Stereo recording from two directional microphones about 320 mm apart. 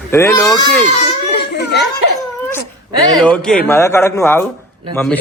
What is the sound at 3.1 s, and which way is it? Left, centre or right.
A man's voice, centre.